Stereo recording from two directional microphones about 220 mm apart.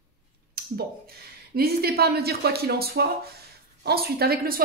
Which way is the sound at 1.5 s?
45° right (ahead or behind).